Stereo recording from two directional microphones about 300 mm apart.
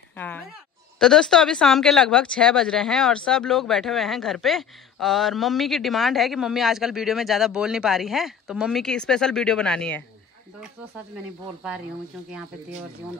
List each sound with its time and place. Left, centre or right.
0.9 s speech: centre